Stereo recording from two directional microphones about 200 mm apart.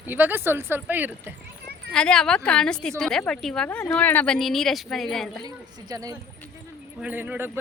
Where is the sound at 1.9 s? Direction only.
5° left (ahead or behind).